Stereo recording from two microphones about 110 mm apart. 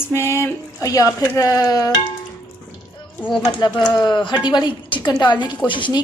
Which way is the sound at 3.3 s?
45° left (ahead or behind).